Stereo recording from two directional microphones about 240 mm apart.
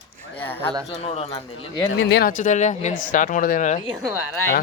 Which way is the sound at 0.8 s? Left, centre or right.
Left.